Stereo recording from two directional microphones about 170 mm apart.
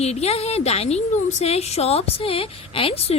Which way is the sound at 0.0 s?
40° left (ahead or behind).